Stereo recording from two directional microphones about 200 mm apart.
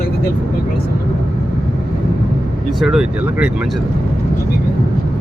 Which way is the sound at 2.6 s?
Centre (ahead or behind).